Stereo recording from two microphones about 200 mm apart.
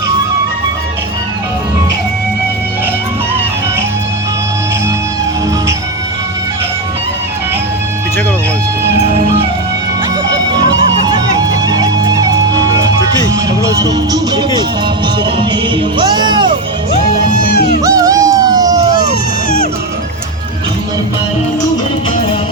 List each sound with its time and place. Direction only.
11.0 s music: 20° right (ahead or behind)
14.1 s music: 20° right (ahead or behind)
16.0 s music: 20° right (ahead or behind)
17.3 s music: 55° left (ahead or behind)
17.8 s a sound: 15° right (ahead or behind)